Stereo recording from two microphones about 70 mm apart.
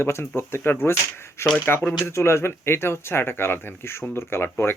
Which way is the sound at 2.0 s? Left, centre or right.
Left.